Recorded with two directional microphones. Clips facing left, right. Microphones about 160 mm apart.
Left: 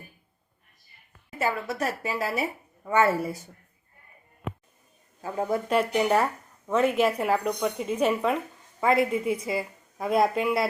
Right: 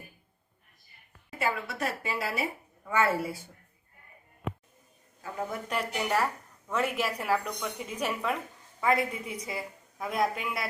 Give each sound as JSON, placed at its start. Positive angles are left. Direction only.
{"t": 1.4, "sound": "a woman's voice", "side_deg": 40}
{"t": 5.2, "sound": "a woman's voice", "side_deg": 30}